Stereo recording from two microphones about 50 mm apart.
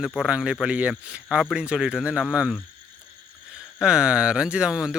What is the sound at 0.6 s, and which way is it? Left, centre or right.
Speech, right.